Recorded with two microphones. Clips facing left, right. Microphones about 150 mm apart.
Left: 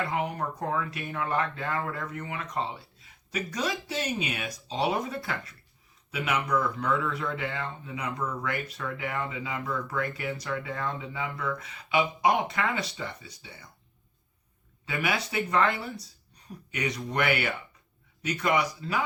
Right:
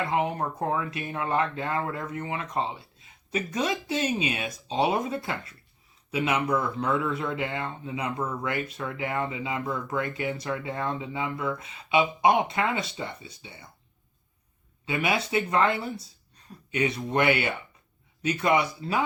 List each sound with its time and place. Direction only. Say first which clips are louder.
0.1 s speech: right 3 dB; 25° right (ahead or behind)
14.8 s speech: right 3 dB; 25° right (ahead or behind)